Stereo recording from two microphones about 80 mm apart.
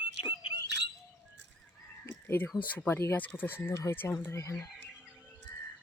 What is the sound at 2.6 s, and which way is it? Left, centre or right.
Speech, centre.